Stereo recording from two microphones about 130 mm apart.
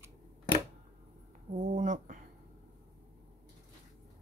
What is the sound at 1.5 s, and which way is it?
Speech, 70° right (ahead or behind).